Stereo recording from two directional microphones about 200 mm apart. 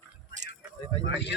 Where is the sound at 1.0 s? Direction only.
60° left (ahead or behind).